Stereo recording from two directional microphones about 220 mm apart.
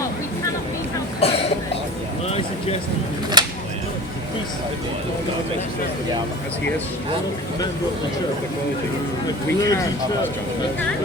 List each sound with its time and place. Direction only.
1.2 s cough: 25° left (ahead or behind)
3.4 s a sound: 20° right (ahead or behind)
9.2 s speech: 15° left (ahead or behind)